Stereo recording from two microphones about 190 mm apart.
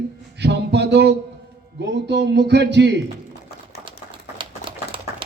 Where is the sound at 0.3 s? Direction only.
65° right (ahead or behind).